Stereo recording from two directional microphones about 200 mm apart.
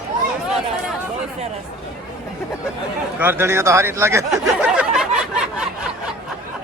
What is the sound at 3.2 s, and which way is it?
Speech, 10° right (ahead or behind).